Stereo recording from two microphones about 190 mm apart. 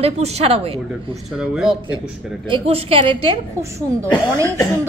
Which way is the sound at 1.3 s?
5° right (ahead or behind).